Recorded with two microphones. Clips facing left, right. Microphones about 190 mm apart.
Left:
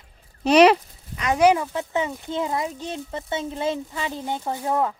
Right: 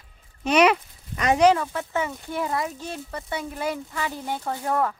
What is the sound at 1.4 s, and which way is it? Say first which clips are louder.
Speech: left 2 dB; 15° left (ahead or behind).